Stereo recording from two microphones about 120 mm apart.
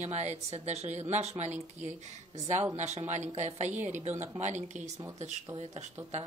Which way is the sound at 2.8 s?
70° right (ahead or behind).